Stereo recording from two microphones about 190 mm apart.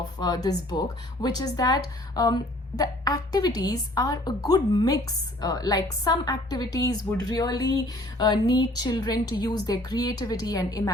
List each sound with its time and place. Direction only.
0.2 s a woman's voice: 20° left (ahead or behind)